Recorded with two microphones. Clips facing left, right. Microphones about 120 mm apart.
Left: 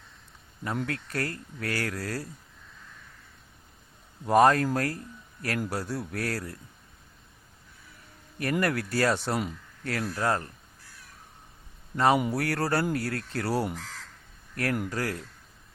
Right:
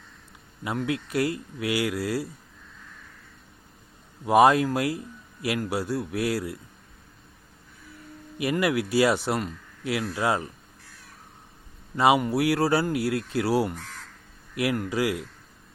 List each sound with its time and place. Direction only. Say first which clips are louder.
0.8 s speech: right 7 dB; 10° right (ahead or behind)
4.3 s speech: right 2 dB; 10° right (ahead or behind)
8.5 s speech: right 4 dB; 5° right (ahead or behind)
11.9 s speech: right 3 dB; 5° right (ahead or behind)
13.7 s speech: even; 90° left
14.5 s speech: right 4 dB; 10° right (ahead or behind)